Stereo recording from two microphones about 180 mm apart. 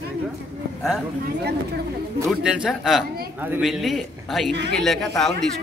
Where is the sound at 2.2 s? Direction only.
5° right (ahead or behind).